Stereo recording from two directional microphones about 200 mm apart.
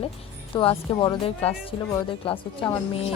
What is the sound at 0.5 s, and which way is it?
Speech, 25° left (ahead or behind).